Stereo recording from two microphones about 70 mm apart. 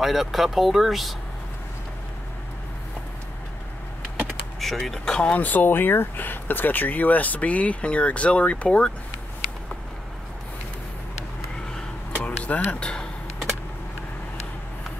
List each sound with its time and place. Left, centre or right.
0.0 s speech: centre
4.6 s speech: centre
12.2 s a sound: left